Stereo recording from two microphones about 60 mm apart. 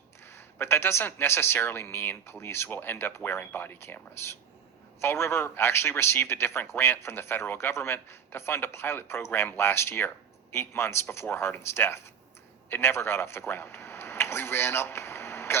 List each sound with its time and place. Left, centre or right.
0.3 s a man's voice: left